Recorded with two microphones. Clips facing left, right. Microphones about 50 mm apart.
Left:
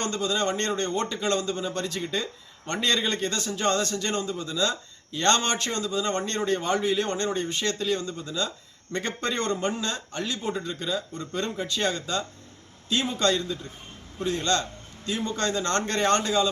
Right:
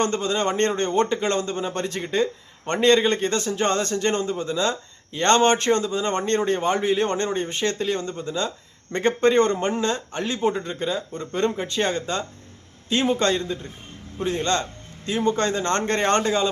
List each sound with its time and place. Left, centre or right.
0.0 s a man's voice: right